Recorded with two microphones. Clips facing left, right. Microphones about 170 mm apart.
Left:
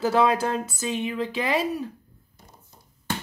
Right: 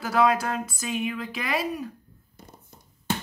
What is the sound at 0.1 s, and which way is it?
Speech, 25° left (ahead or behind).